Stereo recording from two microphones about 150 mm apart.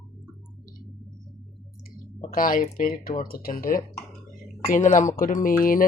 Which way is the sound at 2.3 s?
70° left (ahead or behind).